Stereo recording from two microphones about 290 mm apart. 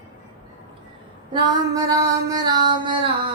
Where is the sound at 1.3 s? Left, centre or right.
Centre.